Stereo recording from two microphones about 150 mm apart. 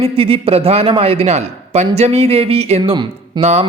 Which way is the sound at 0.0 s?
40° right (ahead or behind).